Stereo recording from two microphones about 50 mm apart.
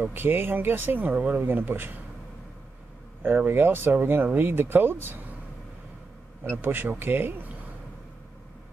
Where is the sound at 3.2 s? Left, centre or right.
Right.